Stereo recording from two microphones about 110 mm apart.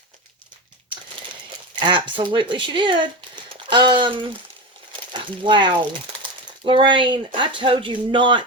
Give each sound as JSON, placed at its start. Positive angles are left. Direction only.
{"t": 1.7, "sound": "speech", "side_deg": -45}
{"t": 5.4, "sound": "speech", "side_deg": -45}